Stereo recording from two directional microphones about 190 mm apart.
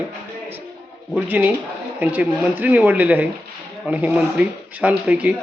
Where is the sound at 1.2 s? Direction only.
10° right (ahead or behind).